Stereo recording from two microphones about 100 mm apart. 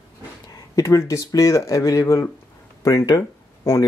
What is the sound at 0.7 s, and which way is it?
Speech, 30° left (ahead or behind).